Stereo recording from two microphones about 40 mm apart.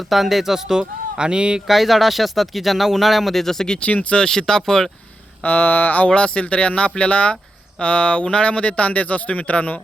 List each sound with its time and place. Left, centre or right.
0.1 s speech: centre
0.8 s speech: right
1.6 s speech: centre
3.8 s speech: left
4.1 s speech: centre
5.5 s speech: left
6.1 s speech: left